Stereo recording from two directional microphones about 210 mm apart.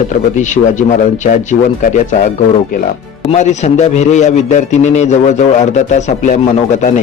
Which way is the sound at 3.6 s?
35° left (ahead or behind).